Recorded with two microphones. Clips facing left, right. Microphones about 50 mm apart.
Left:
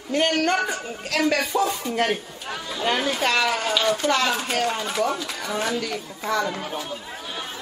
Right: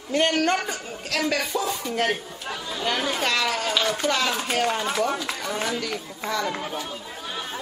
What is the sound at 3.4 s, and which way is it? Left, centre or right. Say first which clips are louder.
A woman's voice: left 2 dB; centre.